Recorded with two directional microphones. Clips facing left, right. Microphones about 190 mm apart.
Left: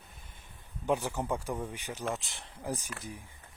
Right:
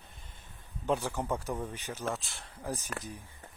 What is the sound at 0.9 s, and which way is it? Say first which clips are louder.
Speech: left 1 dB; 15° left (ahead or behind).